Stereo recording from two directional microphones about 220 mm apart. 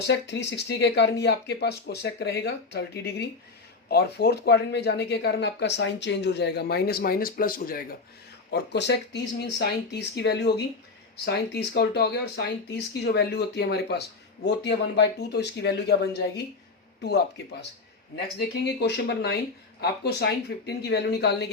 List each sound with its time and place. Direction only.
0.1 s speech: 50° left (ahead or behind)